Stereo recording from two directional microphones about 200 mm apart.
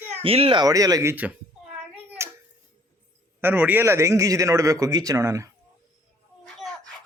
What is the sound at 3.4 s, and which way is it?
A man's voice, 10° right (ahead or behind).